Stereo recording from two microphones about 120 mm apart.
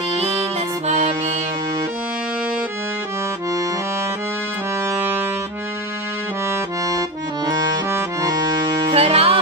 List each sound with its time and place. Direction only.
0.8 s music: 70° right (ahead or behind)
4.9 s music: 15° right (ahead or behind)
7.4 s accordion: 35° right (ahead or behind)
8.9 s music: 55° right (ahead or behind)